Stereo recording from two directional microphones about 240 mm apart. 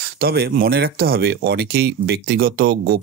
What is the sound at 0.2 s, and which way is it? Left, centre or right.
Speech, right.